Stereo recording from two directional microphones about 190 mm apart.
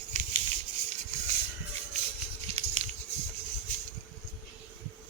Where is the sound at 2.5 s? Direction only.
35° right (ahead or behind).